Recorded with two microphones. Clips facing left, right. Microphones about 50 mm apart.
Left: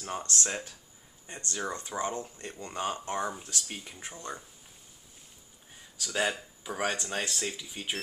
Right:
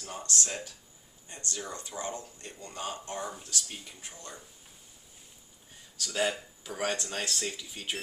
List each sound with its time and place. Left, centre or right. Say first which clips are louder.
0.0 s speech: left 2 dB; left
6.0 s speech: even; centre